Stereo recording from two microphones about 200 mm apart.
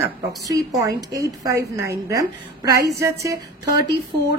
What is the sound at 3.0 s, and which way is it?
Speech, 15° right (ahead or behind).